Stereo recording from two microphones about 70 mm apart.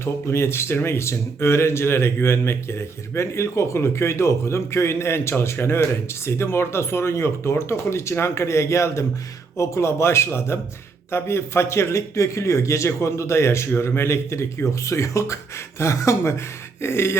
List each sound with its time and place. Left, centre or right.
0.0 s a man's voice: left